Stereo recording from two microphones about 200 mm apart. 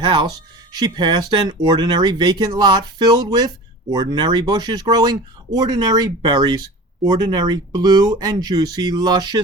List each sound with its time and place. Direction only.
0.0 s speech: 20° right (ahead or behind)